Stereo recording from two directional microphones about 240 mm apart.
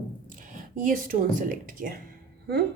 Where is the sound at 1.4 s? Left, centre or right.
Right.